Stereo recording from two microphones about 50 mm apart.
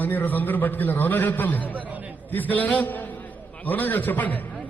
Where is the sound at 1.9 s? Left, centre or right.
Right.